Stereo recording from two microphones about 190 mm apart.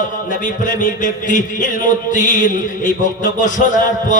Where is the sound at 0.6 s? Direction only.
40° left (ahead or behind).